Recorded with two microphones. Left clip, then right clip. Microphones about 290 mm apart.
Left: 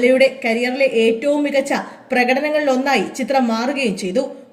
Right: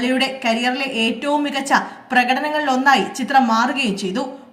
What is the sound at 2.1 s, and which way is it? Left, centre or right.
A woman's voice, right.